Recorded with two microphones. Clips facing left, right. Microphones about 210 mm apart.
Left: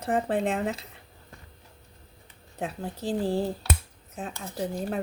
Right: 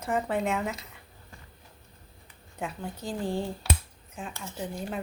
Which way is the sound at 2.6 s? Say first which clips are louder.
Left 3 dB; 35° left (ahead or behind).